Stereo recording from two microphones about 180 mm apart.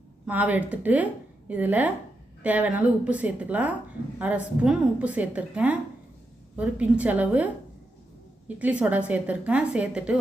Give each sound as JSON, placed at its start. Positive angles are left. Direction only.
{"t": 0.3, "sound": "a woman's voice", "side_deg": -10}
{"t": 8.4, "sound": "a woman's voice", "side_deg": -10}